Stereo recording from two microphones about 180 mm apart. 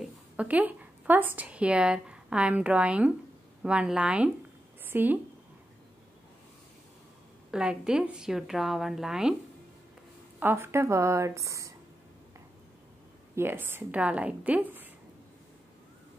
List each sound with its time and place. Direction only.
0.0 s a woman's voice: 10° right (ahead or behind)
7.5 s a woman's voice: 5° right (ahead or behind)
10.4 s a woman's voice: 15° right (ahead or behind)
13.3 s a woman's voice: 10° right (ahead or behind)